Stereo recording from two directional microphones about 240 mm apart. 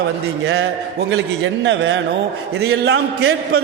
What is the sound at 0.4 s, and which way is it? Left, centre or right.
A woman's voice, right.